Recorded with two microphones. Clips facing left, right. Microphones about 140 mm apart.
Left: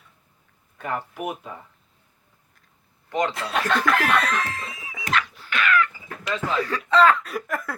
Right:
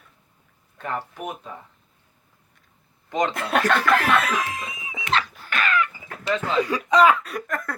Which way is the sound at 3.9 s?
Centre (ahead or behind).